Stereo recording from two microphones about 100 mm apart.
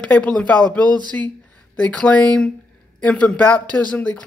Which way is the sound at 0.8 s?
45° right (ahead or behind).